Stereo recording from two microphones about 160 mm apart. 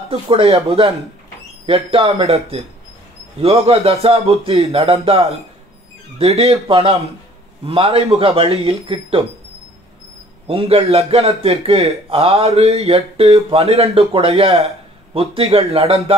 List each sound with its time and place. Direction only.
0.1 s a man's voice: 35° right (ahead or behind)
10.4 s a man's voice: 35° right (ahead or behind)